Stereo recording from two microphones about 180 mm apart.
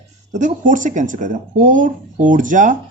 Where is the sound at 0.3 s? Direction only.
45° right (ahead or behind).